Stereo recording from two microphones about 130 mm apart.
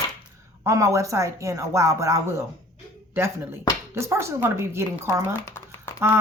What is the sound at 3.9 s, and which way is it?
Speech, 20° right (ahead or behind).